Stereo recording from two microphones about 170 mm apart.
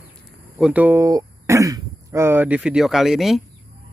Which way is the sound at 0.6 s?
10° right (ahead or behind).